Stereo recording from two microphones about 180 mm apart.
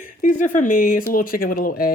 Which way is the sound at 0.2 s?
45° left (ahead or behind).